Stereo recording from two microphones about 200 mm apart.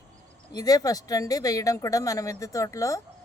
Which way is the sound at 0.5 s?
20° left (ahead or behind).